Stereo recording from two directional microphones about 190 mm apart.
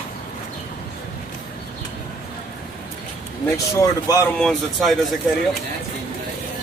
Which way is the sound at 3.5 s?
15° left (ahead or behind).